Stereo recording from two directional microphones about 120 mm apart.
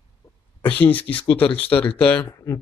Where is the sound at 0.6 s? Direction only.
15° left (ahead or behind).